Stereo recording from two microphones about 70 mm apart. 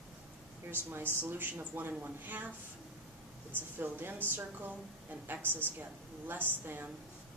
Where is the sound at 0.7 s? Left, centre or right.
Right.